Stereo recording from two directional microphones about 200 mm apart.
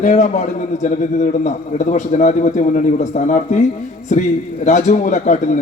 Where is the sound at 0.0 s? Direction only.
35° left (ahead or behind).